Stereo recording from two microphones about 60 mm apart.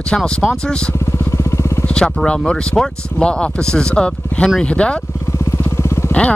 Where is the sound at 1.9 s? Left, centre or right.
Centre.